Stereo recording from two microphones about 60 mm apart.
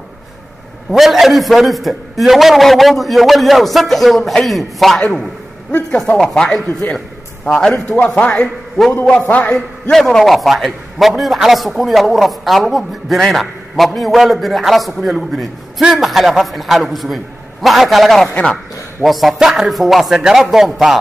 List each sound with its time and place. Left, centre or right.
0.9 s a man's voice: centre
9.9 s a man's voice: centre
18.3 s a man's voice: centre
19.0 s a man's voice: centre